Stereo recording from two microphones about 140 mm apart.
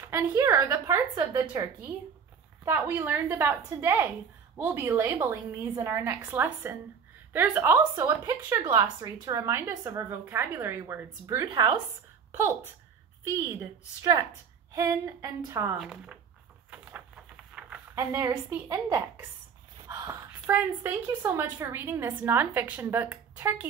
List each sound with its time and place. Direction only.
0.1 s a woman's voice: 20° right (ahead or behind)
2.6 s a woman's voice: 20° right (ahead or behind)
12.3 s speech: 20° right (ahead or behind)
14.7 s a woman's voice: 25° right (ahead or behind)
15.8 s speech: 5° right (ahead or behind)
16.7 s a sound: 10° right (ahead or behind)
17.9 s a woman's voice: 15° right (ahead or behind)
19.9 s a sound: 20° right (ahead or behind)
21.2 s a woman's voice: 20° right (ahead or behind)